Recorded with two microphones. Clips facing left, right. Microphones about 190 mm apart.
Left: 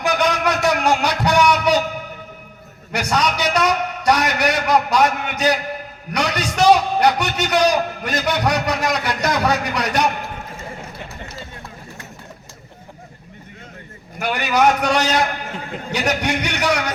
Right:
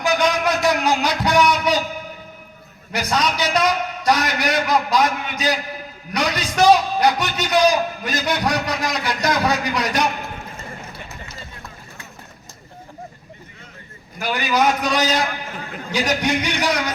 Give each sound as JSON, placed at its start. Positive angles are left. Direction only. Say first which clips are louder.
{"t": 0.0, "sound": "a sound", "louder": "even", "side_deg": 60}
{"t": 2.9, "sound": "a man's voice", "louder": "left 1 dB", "side_deg": 65}
{"t": 14.2, "sound": "a man's voice", "louder": "left 2 dB", "side_deg": 60}